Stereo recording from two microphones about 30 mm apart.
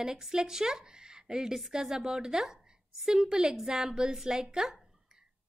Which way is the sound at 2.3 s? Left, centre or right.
Centre.